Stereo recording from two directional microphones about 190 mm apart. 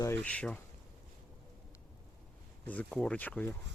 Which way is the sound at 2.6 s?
5° left (ahead or behind).